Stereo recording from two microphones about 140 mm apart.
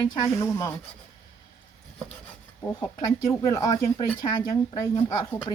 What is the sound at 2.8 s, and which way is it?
A woman's voice, 25° left (ahead or behind).